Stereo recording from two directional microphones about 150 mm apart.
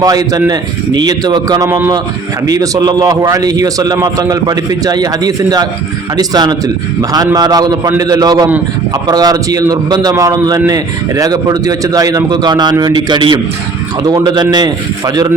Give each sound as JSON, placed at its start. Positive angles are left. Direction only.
{"t": 0.0, "sound": "a man's voice", "side_deg": -25}